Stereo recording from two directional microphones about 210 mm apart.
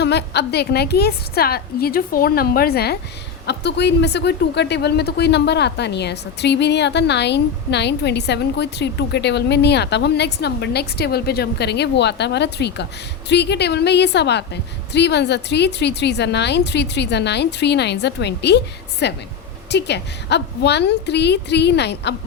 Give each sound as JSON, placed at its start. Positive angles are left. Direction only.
{"t": 0.0, "sound": "speech", "side_deg": 55}